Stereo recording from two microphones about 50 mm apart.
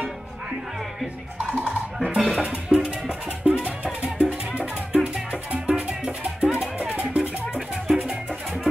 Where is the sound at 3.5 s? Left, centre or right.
Right.